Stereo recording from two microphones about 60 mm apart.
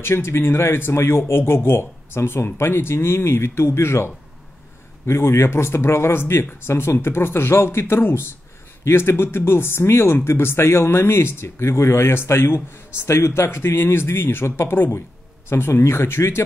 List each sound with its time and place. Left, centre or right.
0.0 s speech: left